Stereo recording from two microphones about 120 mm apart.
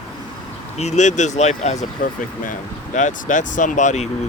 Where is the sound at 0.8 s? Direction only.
75° left (ahead or behind).